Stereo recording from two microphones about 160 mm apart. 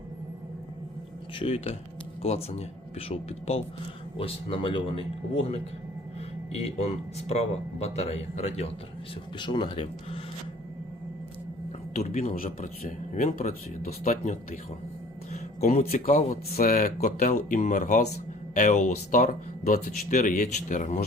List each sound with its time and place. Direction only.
1.4 s speech: 40° left (ahead or behind)
9.4 s speech: 30° left (ahead or behind)
11.9 s speech: 45° left (ahead or behind)
15.3 s music: 45° left (ahead or behind)
15.9 s speech: 60° left (ahead or behind)